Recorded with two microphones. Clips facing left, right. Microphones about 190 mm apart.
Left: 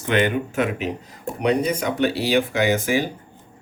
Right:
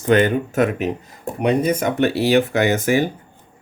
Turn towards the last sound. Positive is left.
turn(degrees=-55)  # may be behind; listen again after turning